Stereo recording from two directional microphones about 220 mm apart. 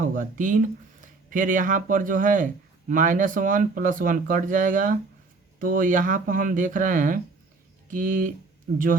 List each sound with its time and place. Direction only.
0.0 s speech: 35° right (ahead or behind)